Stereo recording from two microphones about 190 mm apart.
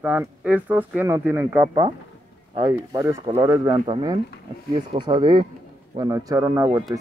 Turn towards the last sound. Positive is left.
turn(degrees=-15)  # may be behind; listen again after turning